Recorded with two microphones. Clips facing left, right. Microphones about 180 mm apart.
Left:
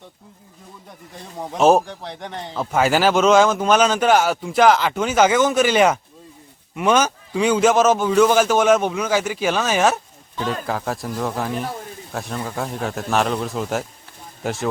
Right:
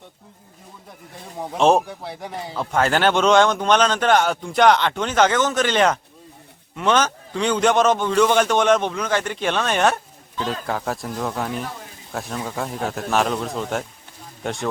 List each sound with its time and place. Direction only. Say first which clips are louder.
0.9 s a man's voice: even; centre (ahead or behind)
2.6 s a man's voice: left 2 dB; 5° left (ahead or behind)